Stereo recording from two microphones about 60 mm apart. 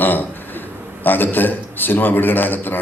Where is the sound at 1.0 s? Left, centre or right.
Left.